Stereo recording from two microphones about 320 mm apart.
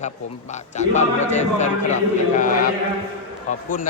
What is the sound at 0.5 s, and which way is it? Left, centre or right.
A man's voice, left.